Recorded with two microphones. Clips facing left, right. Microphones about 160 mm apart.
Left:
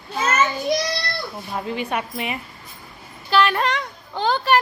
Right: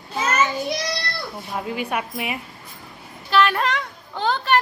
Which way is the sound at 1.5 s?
10° right (ahead or behind).